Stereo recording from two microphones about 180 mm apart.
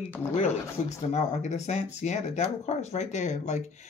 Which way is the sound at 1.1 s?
40° left (ahead or behind).